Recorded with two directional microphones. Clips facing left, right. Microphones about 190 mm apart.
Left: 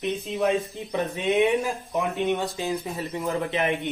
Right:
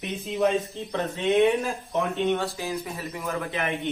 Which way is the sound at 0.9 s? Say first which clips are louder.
Even; 15° left (ahead or behind).